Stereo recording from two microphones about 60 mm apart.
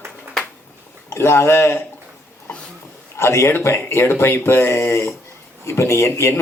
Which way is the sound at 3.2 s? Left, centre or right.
Left.